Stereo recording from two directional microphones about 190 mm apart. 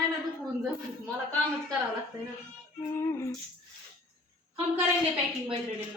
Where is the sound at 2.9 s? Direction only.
15° left (ahead or behind).